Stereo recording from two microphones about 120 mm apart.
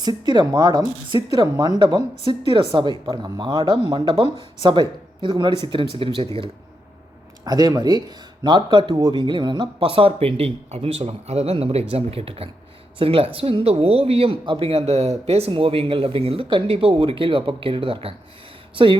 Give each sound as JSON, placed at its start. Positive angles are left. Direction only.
{"t": 0.0, "sound": "speech", "side_deg": -35}
{"t": 7.4, "sound": "speech", "side_deg": -35}